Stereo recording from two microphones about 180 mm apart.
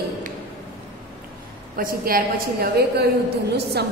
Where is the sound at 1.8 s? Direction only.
55° right (ahead or behind).